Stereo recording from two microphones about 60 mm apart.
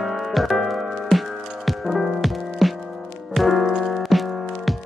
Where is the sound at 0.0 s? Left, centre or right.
Centre.